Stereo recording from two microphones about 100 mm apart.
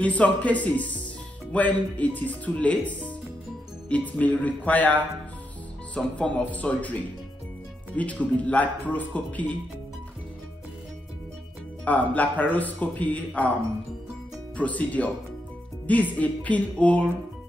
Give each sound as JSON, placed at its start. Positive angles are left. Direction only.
{"t": 0.0, "sound": "speech", "side_deg": 15}
{"t": 11.8, "sound": "speech", "side_deg": 15}
{"t": 14.6, "sound": "speech", "side_deg": 15}